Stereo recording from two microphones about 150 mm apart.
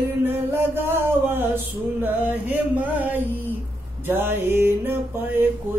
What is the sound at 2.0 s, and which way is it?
Mantra, 10° right (ahead or behind).